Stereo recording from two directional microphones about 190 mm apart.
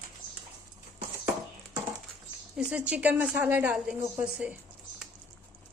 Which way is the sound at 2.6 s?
5° right (ahead or behind).